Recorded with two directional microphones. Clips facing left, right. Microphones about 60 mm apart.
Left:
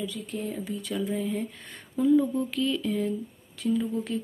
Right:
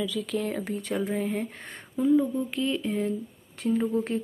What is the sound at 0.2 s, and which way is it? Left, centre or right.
Speech, right.